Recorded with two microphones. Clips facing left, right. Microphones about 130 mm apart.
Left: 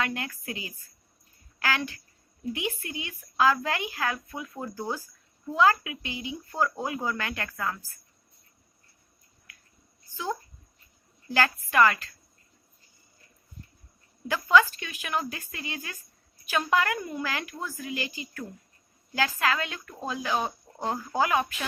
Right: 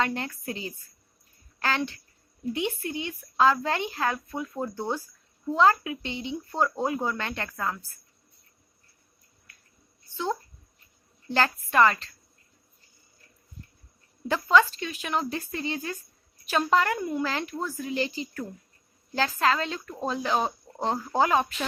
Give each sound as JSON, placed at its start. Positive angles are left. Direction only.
{"t": 0.0, "sound": "speech", "side_deg": -25}
{"t": 11.3, "sound": "speech", "side_deg": -25}
{"t": 14.3, "sound": "speech", "side_deg": -25}